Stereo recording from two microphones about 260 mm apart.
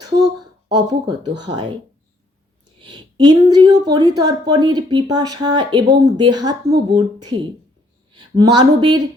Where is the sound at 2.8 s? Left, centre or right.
Centre.